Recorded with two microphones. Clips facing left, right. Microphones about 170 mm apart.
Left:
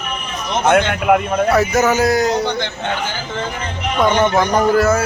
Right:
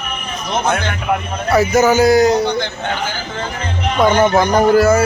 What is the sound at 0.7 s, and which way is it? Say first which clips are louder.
Speech: left 10 dB; 65° left (ahead or behind).